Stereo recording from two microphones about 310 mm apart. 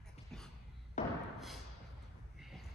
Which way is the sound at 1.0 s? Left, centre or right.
Left.